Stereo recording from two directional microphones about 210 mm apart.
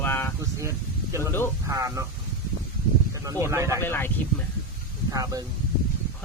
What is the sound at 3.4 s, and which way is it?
Speech, 15° right (ahead or behind).